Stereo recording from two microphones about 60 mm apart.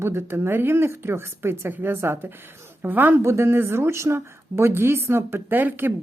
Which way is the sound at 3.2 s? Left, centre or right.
Right.